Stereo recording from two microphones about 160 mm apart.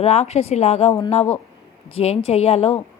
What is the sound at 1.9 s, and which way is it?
Speech, 40° left (ahead or behind).